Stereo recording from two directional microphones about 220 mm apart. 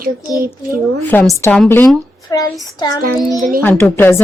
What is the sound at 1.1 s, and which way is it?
A woman's voice, 10° left (ahead or behind).